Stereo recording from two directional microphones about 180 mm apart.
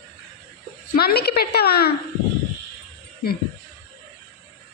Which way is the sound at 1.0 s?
60° left (ahead or behind).